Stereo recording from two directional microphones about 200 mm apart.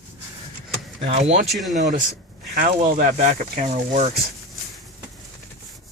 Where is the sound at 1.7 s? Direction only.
35° right (ahead or behind).